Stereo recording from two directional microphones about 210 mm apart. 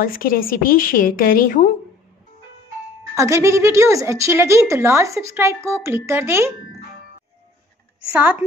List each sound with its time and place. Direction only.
0.0 s a woman's voice: 45° left (ahead or behind)
3.2 s a woman's voice: 15° right (ahead or behind)
8.1 s a woman's voice: 5° right (ahead or behind)